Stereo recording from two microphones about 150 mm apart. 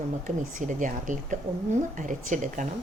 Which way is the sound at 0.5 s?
60° right (ahead or behind).